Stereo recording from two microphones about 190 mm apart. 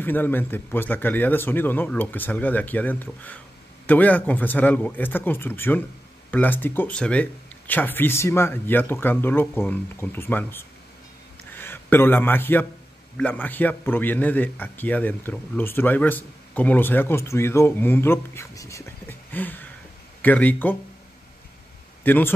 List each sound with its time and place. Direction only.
0.0 s a man's voice: 10° left (ahead or behind)
22.0 s a man's voice: 10° left (ahead or behind)